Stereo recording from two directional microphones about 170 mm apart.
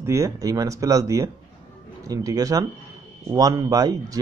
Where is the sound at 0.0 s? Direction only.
20° right (ahead or behind).